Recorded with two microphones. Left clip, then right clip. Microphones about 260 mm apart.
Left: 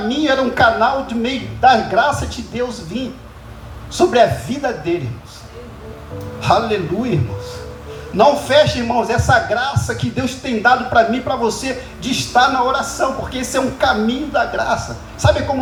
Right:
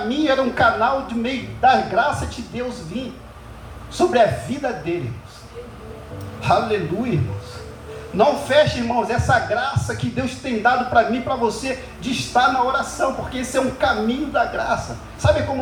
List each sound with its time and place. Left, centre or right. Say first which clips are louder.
0.1 s speech: left 3 dB; left
6.4 s speech: left 3 dB; left